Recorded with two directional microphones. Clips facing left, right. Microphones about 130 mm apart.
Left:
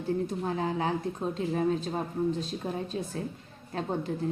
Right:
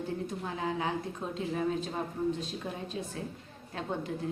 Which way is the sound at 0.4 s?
35° left (ahead or behind).